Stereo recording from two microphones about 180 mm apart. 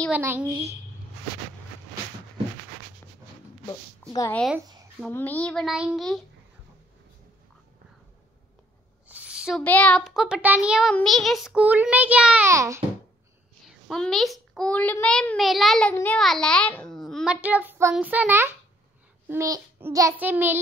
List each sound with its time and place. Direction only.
0.1 s child singing: 10° right (ahead or behind)
4.3 s a child's voice: 5° left (ahead or behind)
9.0 s a sound: 10° right (ahead or behind)
9.6 s a child's voice: 10° left (ahead or behind)
12.4 s child singing: 15° right (ahead or behind)
13.7 s a child's voice: 5° left (ahead or behind); by 17.9 s 15° right (ahead or behind)
17.9 s child singing: 10° right (ahead or behind)